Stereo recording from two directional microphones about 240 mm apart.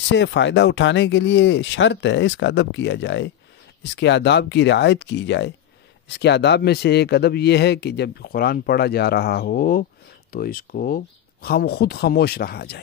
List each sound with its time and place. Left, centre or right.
0.1 s a man's voice: left